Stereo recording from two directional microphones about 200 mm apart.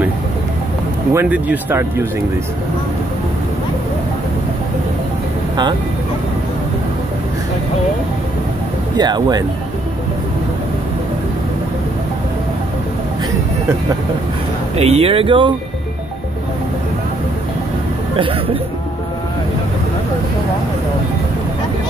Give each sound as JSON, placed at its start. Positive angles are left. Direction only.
{"t": 1.1, "sound": "speech", "side_deg": -10}
{"t": 8.9, "sound": "speech", "side_deg": -20}
{"t": 14.8, "sound": "speech", "side_deg": -30}
{"t": 18.1, "sound": "speech", "side_deg": -25}